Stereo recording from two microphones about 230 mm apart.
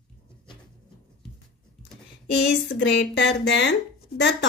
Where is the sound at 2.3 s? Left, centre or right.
Left.